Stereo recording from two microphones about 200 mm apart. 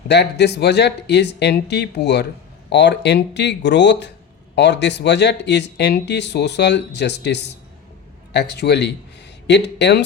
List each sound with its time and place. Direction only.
0.1 s speech: 55° left (ahead or behind)